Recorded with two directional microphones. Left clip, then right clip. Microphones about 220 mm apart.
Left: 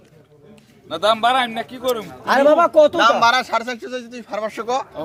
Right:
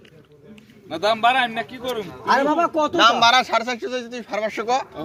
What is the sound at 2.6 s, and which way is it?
Speech, 25° left (ahead or behind).